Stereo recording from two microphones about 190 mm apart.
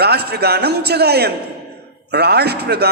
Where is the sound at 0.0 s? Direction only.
60° right (ahead or behind).